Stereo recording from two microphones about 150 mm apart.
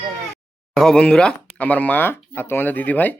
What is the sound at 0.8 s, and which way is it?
Speech, 5° left (ahead or behind).